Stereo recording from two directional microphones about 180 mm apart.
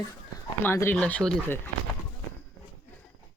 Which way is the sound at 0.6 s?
15° left (ahead or behind).